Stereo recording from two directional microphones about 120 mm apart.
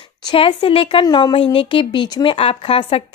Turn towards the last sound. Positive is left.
turn(degrees=50)  # may be behind; listen again after turning